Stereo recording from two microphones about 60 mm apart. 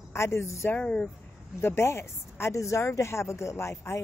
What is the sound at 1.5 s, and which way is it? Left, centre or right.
Speech, left.